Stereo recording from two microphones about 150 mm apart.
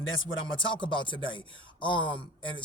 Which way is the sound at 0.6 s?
35° left (ahead or behind).